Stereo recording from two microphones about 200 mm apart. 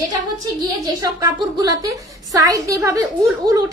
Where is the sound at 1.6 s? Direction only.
20° right (ahead or behind).